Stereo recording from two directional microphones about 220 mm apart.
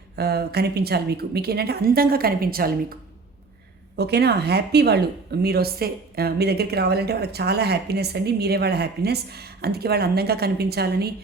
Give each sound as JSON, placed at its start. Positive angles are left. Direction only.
{"t": 0.2, "sound": "a woman's voice", "side_deg": -45}
{"t": 3.9, "sound": "a woman's voice", "side_deg": -50}